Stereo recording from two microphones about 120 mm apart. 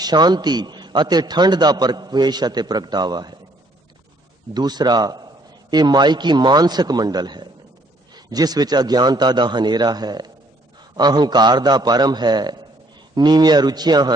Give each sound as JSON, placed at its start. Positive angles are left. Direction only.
{"t": 0.0, "sound": "a man's voice", "side_deg": -35}
{"t": 4.5, "sound": "a man's voice", "side_deg": -35}